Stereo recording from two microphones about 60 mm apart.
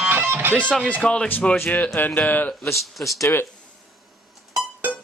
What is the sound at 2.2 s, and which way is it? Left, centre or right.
Speech, left.